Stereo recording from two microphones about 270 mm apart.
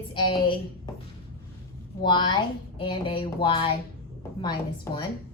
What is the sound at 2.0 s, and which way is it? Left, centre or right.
A woman's voice, centre.